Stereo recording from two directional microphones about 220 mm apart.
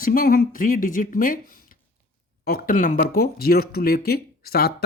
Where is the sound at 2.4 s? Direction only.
40° left (ahead or behind).